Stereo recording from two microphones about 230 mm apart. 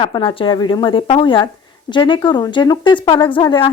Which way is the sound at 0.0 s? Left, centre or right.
Left.